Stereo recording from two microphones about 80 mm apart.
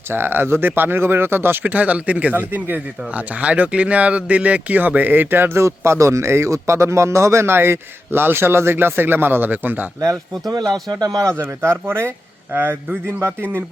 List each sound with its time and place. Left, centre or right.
0.1 s speech: right
10.5 s a man's voice: right